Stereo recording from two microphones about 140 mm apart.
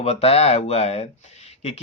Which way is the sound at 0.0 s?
50° left (ahead or behind).